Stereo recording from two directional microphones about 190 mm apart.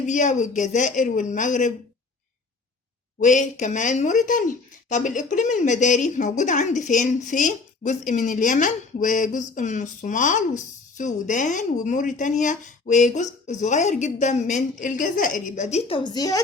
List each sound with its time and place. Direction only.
0.0 s speech: 40° left (ahead or behind)
3.2 s speech: 40° left (ahead or behind); by 16.4 s 20° left (ahead or behind)